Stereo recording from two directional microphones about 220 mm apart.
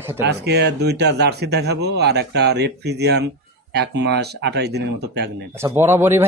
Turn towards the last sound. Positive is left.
turn(degrees=-10)  # may be behind; listen again after turning